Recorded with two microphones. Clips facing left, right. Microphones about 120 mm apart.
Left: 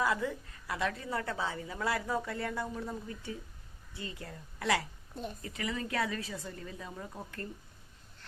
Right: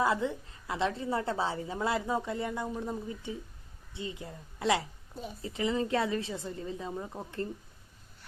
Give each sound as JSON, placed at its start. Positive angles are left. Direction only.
{"t": 0.0, "sound": "a woman's voice", "side_deg": -25}
{"t": 5.1, "sound": "speech", "side_deg": 0}
{"t": 5.4, "sound": "a woman's voice", "side_deg": -25}